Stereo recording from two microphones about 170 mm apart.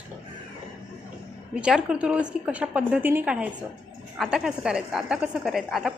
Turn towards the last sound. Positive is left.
turn(degrees=0)  # may be behind; listen again after turning